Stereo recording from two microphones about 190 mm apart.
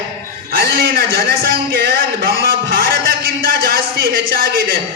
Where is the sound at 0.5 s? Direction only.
50° right (ahead or behind).